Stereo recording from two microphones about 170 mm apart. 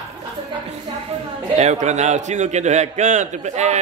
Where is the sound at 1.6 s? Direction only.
45° right (ahead or behind).